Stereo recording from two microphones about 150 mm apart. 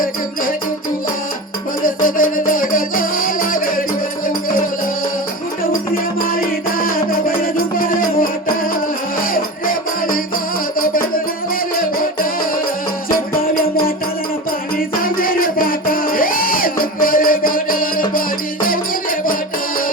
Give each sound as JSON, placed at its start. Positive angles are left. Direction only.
{"t": 1.8, "sound": "music", "side_deg": 65}
{"t": 6.7, "sound": "music", "side_deg": 70}
{"t": 9.3, "sound": "music", "side_deg": 70}
{"t": 11.8, "sound": "music", "side_deg": 70}
{"t": 14.8, "sound": "music", "side_deg": 75}